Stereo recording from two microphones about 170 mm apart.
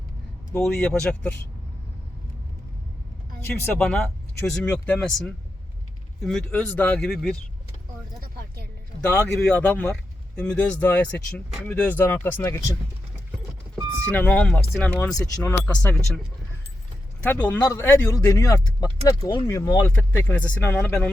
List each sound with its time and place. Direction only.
0.6 s speech: 5° left (ahead or behind)
3.8 s speech: 5° left (ahead or behind)
8.2 s a sound: 65° right (ahead or behind)
9.0 s speech: 5° left (ahead or behind)
14.0 s speech: 10° left (ahead or behind)
17.2 s speech: 10° left (ahead or behind)